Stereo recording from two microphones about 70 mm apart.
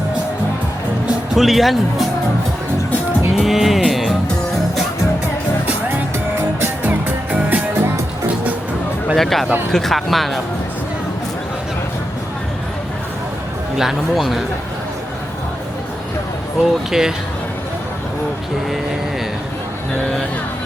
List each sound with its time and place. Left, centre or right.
1.3 s speech: centre
3.3 s speech: centre
3.8 s music: centre
7.3 s music: centre
9.1 s speech: centre
13.7 s speech: centre
16.6 s speech: centre